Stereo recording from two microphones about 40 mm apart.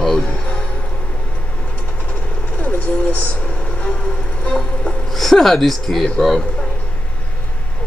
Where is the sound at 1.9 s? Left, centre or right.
Left.